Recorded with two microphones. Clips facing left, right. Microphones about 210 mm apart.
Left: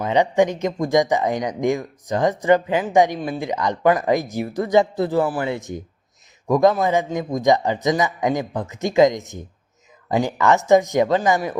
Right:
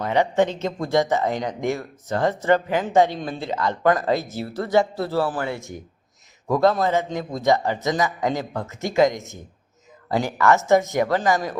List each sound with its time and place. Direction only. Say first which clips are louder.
0.0 s speech: left 2 dB; 20° left (ahead or behind)